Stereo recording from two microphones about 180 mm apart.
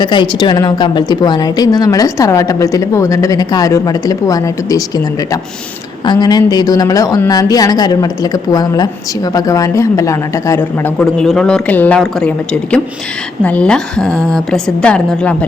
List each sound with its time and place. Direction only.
0.0 s a woman's voice: 25° left (ahead or behind)
6.1 s a woman's voice: 25° left (ahead or behind)
11.0 s a man's voice: 5° left (ahead or behind)
13.4 s a man's voice: 5° left (ahead or behind)